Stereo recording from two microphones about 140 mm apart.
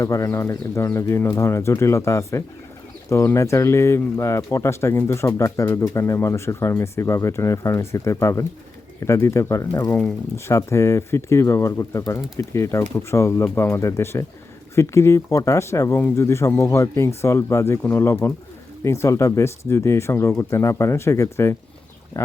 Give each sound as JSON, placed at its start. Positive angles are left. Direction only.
{"t": 0.0, "sound": "speech", "side_deg": 20}